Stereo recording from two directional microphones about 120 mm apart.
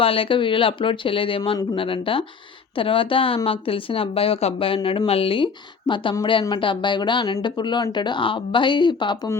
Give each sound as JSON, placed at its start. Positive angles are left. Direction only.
{"t": 0.0, "sound": "speech", "side_deg": 50}